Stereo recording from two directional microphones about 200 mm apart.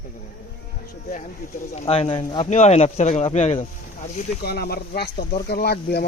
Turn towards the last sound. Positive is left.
turn(degrees=50)  # may be behind; listen again after turning